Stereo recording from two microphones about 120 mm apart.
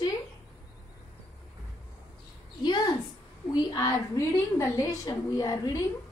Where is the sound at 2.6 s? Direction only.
35° left (ahead or behind).